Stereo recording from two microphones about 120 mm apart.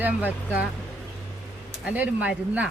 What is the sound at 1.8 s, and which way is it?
Speech, 10° right (ahead or behind).